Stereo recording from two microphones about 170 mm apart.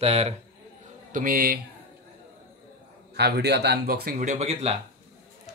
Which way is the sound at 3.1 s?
75° right (ahead or behind).